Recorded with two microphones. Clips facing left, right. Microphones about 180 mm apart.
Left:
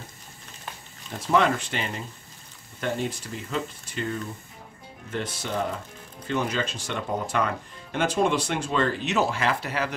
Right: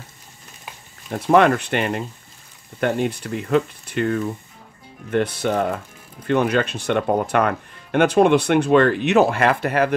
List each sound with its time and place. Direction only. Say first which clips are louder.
1.1 s speech: right 7 dB; 60° right (ahead or behind)